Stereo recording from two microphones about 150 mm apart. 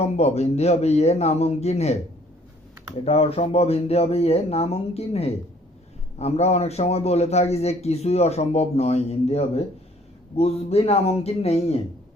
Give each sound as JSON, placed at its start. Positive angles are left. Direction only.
{"t": 0.0, "sound": "a man's voice", "side_deg": 45}
{"t": 3.0, "sound": "a man's voice", "side_deg": 45}